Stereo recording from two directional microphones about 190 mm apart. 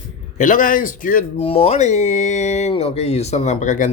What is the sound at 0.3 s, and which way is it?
Speech, 45° left (ahead or behind).